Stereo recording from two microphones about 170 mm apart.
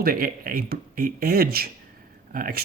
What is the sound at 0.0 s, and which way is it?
Speech, 60° right (ahead or behind).